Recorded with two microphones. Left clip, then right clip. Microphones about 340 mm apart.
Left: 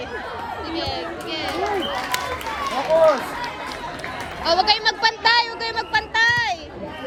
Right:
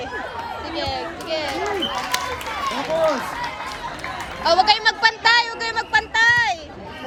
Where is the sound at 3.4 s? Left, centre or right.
Right.